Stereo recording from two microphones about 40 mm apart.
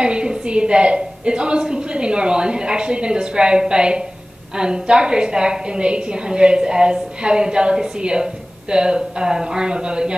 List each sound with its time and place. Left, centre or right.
0.0 s a woman's voice: right